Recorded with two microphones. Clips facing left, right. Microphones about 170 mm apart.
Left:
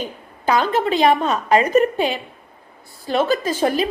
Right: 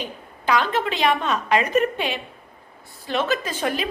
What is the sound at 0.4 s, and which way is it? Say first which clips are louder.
A woman's voice: left 4 dB; 45° left (ahead or behind).